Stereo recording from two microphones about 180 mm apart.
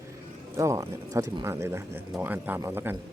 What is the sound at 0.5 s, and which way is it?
Speech, 20° right (ahead or behind).